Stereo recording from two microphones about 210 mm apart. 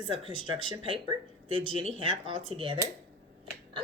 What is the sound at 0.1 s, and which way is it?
A woman's voice, 25° right (ahead or behind).